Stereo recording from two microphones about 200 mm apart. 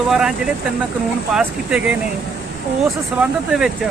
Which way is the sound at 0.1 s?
5° right (ahead or behind).